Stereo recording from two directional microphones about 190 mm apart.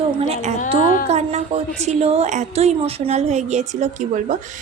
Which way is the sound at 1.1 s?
35° right (ahead or behind).